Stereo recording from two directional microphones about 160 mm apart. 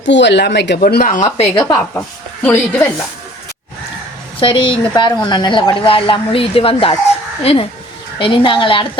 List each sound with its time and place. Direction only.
0.1 s speech: 90° left; by 1.3 s 55° left (ahead or behind)
1.4 s speech: 35° left (ahead or behind)
1.6 s speech: 20° left (ahead or behind)
4.4 s speech: 35° left (ahead or behind)